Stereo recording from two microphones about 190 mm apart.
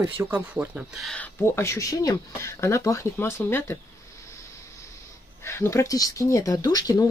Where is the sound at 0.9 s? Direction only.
5° left (ahead or behind).